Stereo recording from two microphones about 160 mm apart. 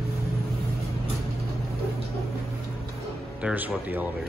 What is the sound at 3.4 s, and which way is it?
Speech, 10° right (ahead or behind).